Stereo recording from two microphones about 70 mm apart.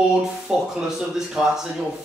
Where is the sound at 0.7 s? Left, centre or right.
Centre.